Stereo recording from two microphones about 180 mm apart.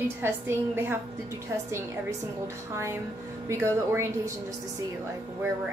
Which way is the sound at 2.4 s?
15° right (ahead or behind).